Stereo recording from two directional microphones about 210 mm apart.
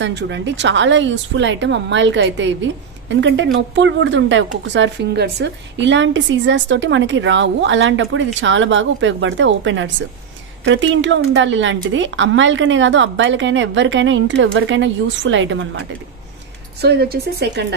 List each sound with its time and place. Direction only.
0.0 s a woman's voice: 60° right (ahead or behind)
16.8 s speech: 50° right (ahead or behind)